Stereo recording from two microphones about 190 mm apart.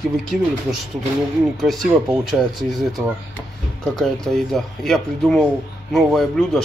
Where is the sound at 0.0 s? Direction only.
Centre (ahead or behind).